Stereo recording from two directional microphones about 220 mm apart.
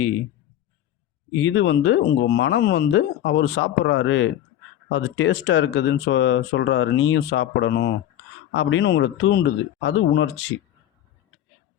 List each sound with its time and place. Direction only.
1.4 s speech: 60° left (ahead or behind)